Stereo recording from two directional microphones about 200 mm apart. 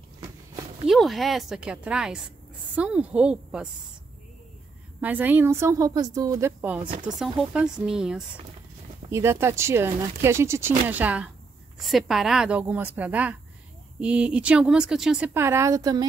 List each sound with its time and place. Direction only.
0.8 s speech: centre (ahead or behind)
5.0 s speech: 10° right (ahead or behind)
6.9 s speech: 40° right (ahead or behind)
7.2 s speech: 5° right (ahead or behind); by 16.1 s 20° right (ahead or behind)